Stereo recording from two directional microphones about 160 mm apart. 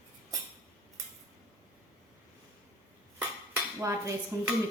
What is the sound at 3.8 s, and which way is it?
Cutlery, 20° right (ahead or behind).